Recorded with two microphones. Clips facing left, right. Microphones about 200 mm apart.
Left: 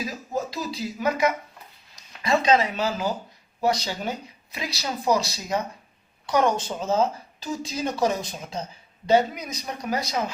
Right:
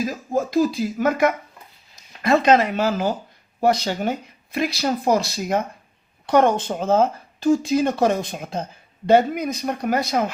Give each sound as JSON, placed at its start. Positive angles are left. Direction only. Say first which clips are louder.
{"t": 0.0, "sound": "speech", "louder": "right 6 dB", "side_deg": -50}